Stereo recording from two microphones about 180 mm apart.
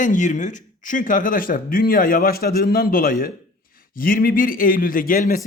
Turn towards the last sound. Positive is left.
turn(degrees=55)  # may be behind; listen again after turning